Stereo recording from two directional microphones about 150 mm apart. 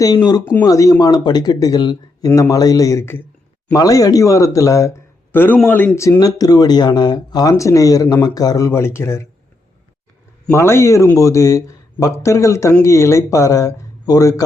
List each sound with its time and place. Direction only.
0.0 s speech: 25° left (ahead or behind)
10.5 s speech: 15° left (ahead or behind)